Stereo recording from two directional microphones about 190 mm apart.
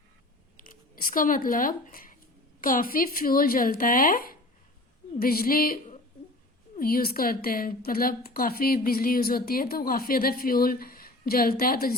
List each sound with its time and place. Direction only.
0.5 s a woman's voice: 45° left (ahead or behind)